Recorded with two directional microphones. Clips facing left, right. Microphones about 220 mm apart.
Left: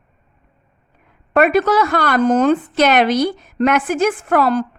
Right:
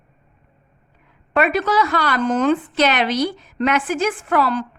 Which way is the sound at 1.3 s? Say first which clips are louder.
Left 4 dB; 50° left (ahead or behind).